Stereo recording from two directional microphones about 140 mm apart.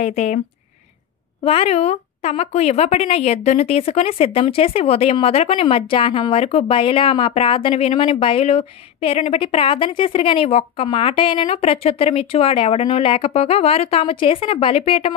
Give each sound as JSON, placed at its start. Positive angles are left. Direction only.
{"t": 0.0, "sound": "speech", "side_deg": 60}
{"t": 1.4, "sound": "speech", "side_deg": 45}